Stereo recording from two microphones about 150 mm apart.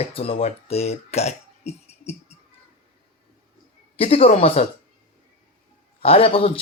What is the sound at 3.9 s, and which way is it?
Speech, 40° left (ahead or behind).